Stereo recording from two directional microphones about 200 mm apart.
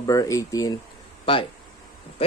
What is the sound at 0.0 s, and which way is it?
Speech, 15° left (ahead or behind).